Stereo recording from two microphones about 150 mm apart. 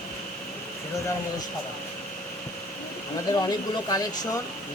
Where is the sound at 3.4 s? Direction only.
25° left (ahead or behind).